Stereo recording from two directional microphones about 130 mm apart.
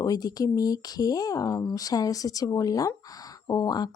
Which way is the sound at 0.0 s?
30° left (ahead or behind).